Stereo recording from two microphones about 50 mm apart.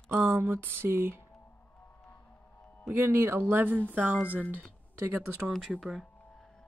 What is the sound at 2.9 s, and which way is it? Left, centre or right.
Speech, right.